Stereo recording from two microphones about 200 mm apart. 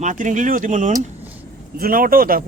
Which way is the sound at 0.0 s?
40° right (ahead or behind).